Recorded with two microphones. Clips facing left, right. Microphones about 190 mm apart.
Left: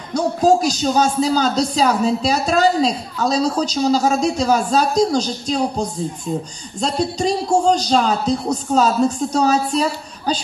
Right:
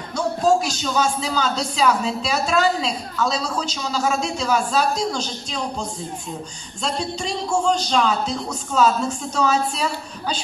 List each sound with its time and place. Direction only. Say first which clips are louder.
0.1 s speech: left 4 dB; 40° left (ahead or behind)